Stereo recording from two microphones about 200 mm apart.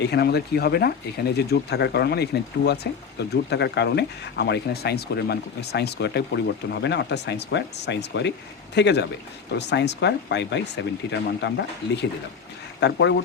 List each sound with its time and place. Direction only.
0.0 s speech: 55° left (ahead or behind)